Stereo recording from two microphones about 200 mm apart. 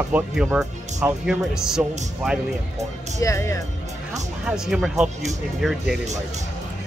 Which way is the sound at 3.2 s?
15° left (ahead or behind).